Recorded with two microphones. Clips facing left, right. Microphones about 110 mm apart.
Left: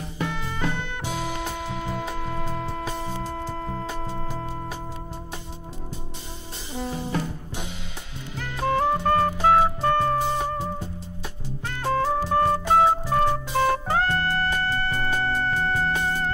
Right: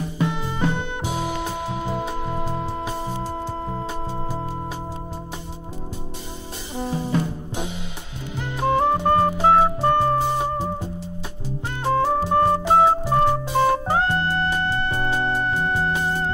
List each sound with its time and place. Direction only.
0.2 s music: 20° right (ahead or behind)
6.7 s music: 20° right (ahead or behind)
8.4 s music: 20° right (ahead or behind)